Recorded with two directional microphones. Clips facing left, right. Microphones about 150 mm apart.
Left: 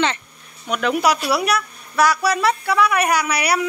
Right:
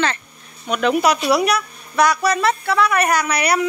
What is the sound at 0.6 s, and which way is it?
Speech, centre (ahead or behind).